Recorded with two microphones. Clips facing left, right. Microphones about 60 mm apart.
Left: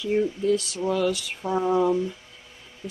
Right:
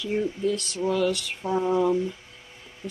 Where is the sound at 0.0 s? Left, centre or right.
Centre.